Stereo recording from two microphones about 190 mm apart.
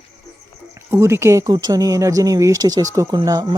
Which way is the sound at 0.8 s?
15° right (ahead or behind).